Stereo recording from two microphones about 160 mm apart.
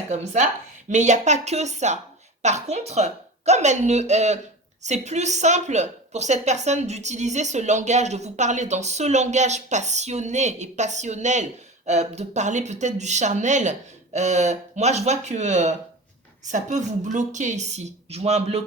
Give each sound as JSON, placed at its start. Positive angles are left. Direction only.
{"t": 0.1, "sound": "a woman's voice", "side_deg": -50}